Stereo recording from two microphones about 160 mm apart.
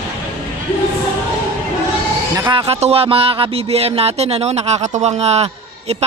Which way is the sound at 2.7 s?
40° right (ahead or behind).